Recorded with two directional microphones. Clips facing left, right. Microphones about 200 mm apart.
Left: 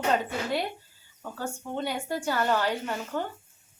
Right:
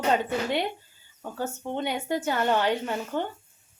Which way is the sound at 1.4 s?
20° right (ahead or behind).